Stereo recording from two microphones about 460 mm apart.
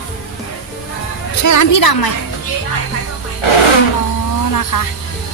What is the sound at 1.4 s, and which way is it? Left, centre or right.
Speech, left.